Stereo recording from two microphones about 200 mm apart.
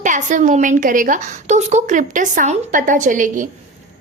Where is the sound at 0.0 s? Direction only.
40° right (ahead or behind).